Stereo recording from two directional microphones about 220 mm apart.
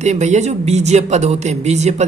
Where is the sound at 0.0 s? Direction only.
30° right (ahead or behind).